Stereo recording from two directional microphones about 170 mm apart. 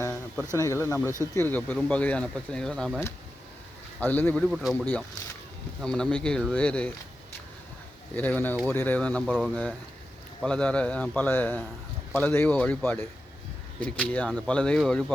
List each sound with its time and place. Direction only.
0.0 s a sound: 15° left (ahead or behind)
0.5 s speech: 15° left (ahead or behind)
4.0 s speech: 10° left (ahead or behind)
8.1 s speech: 10° left (ahead or behind)